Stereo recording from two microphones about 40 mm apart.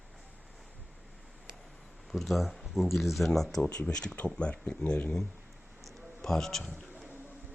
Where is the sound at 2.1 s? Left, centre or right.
Centre.